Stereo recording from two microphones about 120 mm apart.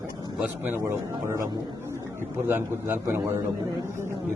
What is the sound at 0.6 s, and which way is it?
Speech, 20° right (ahead or behind).